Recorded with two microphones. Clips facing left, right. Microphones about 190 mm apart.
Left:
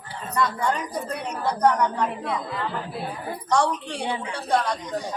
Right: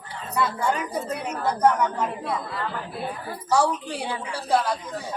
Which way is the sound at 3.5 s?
5° right (ahead or behind).